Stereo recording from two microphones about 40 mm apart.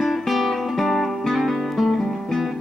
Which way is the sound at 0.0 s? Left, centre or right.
Centre.